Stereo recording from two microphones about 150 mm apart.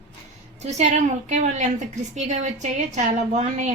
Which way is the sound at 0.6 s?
50° right (ahead or behind).